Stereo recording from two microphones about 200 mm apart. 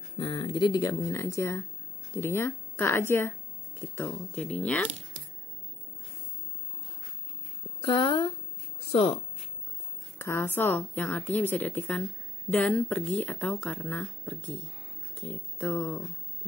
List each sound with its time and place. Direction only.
0.2 s speech: 20° left (ahead or behind); by 4.8 s 5° left (ahead or behind)
7.8 s speech: 25° left (ahead or behind)
10.1 s speech: 10° left (ahead or behind)